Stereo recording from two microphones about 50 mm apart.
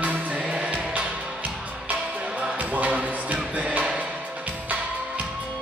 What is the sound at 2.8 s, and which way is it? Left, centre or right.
Music, right.